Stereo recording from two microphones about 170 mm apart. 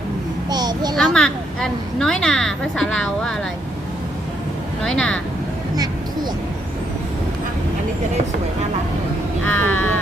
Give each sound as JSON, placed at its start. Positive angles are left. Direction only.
{"t": 0.5, "sound": "a sound", "side_deg": -25}
{"t": 0.9, "sound": "a woman's voice", "side_deg": 5}
{"t": 4.8, "sound": "a woman's voice", "side_deg": 5}
{"t": 9.4, "sound": "crow", "side_deg": 10}